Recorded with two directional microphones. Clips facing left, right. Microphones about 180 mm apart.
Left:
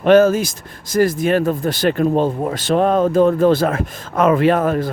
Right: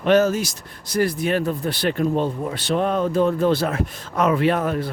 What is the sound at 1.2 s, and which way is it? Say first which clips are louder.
Speech: left 5 dB; 50° left (ahead or behind).